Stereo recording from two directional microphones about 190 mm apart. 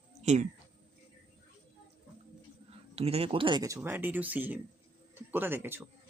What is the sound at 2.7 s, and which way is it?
Speech, 30° right (ahead or behind).